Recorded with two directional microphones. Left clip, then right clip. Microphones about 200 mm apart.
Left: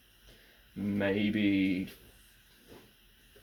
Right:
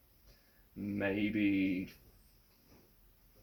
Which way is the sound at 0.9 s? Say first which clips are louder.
Left 4 dB; 15° left (ahead or behind).